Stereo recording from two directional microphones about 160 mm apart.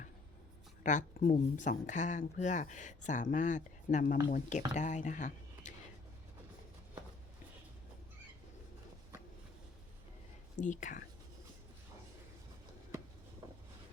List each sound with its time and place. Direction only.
0.8 s speech: 50° left (ahead or behind)
10.6 s speech: 50° left (ahead or behind)